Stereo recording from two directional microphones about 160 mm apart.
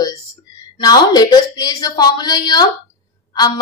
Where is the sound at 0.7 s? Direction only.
25° left (ahead or behind).